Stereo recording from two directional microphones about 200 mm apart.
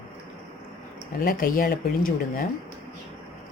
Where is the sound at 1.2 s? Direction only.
45° left (ahead or behind).